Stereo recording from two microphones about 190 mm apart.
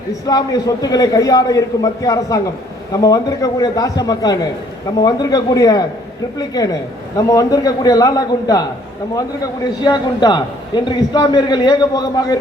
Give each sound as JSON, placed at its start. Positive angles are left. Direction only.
{"t": 0.3, "sound": "a man's voice", "side_deg": 20}